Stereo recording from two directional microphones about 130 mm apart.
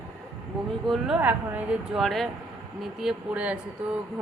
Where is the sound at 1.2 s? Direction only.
10° right (ahead or behind).